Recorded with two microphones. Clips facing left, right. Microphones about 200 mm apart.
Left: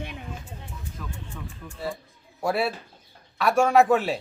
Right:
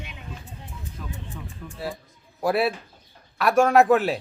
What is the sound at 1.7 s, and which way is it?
A man's voice, centre (ahead or behind).